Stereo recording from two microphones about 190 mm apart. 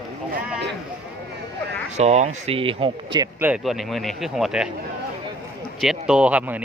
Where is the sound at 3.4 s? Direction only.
5° right (ahead or behind).